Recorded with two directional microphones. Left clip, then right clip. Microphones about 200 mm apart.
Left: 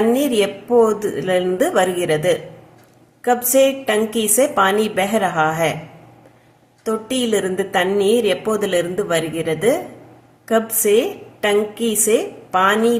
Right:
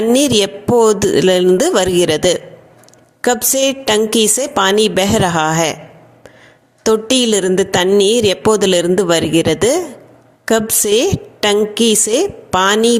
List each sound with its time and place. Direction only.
0.0 s a woman's voice: 45° right (ahead or behind)
6.8 s a woman's voice: 45° right (ahead or behind)